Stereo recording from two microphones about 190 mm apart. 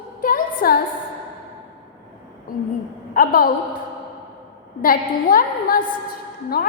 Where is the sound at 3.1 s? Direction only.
50° left (ahead or behind).